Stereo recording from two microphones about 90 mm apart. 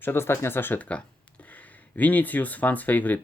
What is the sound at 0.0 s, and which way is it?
Speech, 25° left (ahead or behind).